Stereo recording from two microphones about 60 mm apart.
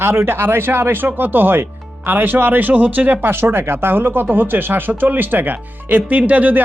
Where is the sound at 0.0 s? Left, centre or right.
Right.